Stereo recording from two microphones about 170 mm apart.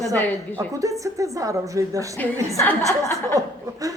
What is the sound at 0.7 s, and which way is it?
A woman's voice, 20° right (ahead or behind).